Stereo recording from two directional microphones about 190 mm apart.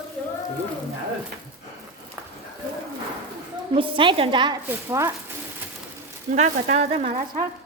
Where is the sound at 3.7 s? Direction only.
30° right (ahead or behind).